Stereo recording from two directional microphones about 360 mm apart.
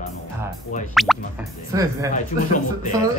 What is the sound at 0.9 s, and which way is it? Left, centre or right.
Speech, centre.